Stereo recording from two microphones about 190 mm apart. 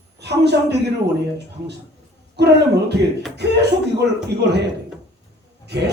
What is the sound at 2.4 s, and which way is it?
Speech, 60° right (ahead or behind).